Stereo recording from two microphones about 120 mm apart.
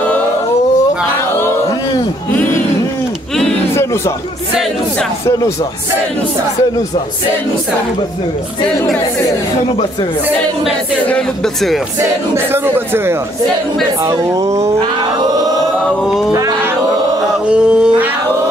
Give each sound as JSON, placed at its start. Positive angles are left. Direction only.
{"t": 11.1, "sound": "speech", "side_deg": 5}
{"t": 12.0, "sound": "speech", "side_deg": -20}
{"t": 14.8, "sound": "chant", "side_deg": -35}
{"t": 16.0, "sound": "a sound", "side_deg": -5}
{"t": 17.5, "sound": "male singing", "side_deg": -10}